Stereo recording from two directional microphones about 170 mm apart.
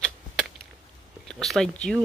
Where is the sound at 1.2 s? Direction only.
Centre (ahead or behind).